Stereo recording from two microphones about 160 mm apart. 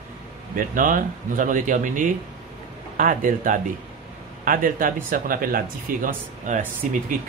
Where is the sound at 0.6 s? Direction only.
55° right (ahead or behind).